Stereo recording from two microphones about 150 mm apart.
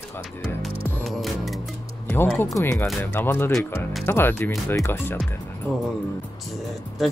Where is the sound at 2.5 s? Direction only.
15° left (ahead or behind).